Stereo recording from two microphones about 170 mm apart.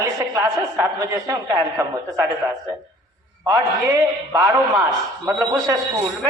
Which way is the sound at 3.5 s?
20° right (ahead or behind).